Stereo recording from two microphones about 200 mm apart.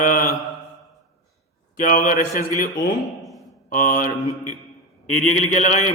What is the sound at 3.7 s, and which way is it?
Speech, 40° left (ahead or behind).